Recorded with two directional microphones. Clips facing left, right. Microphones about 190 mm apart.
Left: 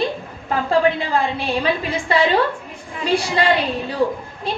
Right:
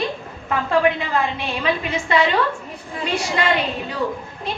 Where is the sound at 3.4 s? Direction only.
35° left (ahead or behind).